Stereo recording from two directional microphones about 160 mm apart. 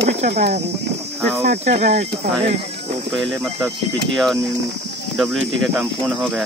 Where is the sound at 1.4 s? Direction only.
50° right (ahead or behind).